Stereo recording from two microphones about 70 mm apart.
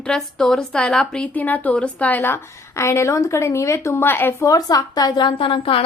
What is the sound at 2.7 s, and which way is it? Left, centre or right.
A woman's voice, left.